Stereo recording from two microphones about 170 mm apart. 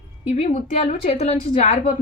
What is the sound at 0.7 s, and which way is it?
A woman's voice, 40° left (ahead or behind).